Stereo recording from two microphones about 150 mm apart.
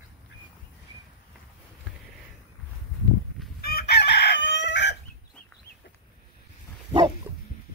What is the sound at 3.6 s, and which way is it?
Chicken, 90° left.